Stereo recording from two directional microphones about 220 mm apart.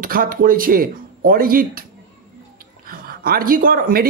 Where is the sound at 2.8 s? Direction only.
40° right (ahead or behind).